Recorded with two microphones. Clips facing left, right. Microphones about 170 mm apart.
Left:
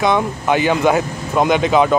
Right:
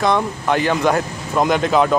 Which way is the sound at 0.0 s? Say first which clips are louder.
Left 1 dB; centre (ahead or behind).